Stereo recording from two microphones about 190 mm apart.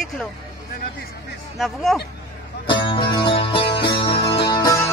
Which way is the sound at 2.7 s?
25° left (ahead or behind).